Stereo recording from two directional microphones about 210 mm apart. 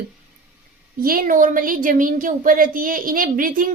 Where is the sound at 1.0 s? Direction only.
45° right (ahead or behind).